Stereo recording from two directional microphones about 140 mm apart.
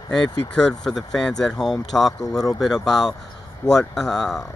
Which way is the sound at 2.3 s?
25° left (ahead or behind).